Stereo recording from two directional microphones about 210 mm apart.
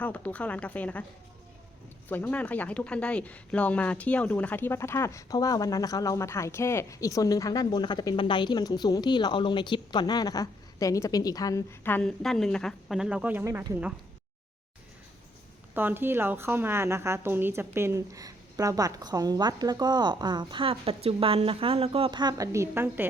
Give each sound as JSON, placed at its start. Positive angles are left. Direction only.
{"t": 0.0, "sound": "speech", "side_deg": 5}
{"t": 2.0, "sound": "speech", "side_deg": 10}
{"t": 15.7, "sound": "a woman's voice", "side_deg": -10}